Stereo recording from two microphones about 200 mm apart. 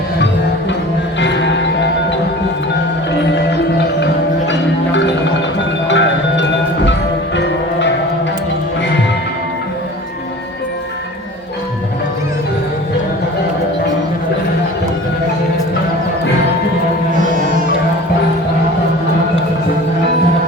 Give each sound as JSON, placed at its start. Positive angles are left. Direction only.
{"t": 1.2, "sound": "music", "side_deg": 60}
{"t": 3.8, "sound": "music", "side_deg": 65}
{"t": 17.2, "sound": "music", "side_deg": -40}